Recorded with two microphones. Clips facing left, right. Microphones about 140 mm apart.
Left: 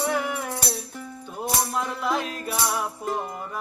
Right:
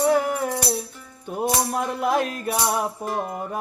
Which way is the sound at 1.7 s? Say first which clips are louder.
Right 4 dB; 50° right (ahead or behind).